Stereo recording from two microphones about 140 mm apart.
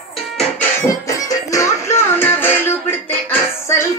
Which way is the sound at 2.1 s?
15° left (ahead or behind).